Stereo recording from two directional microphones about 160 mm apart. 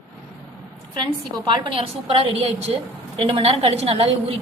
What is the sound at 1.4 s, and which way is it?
A woman's voice, 30° right (ahead or behind).